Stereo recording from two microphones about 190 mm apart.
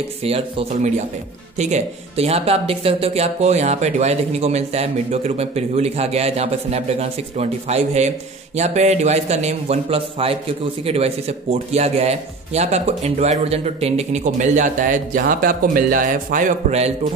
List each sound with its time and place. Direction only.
0.2 s a man's voice: 30° right (ahead or behind)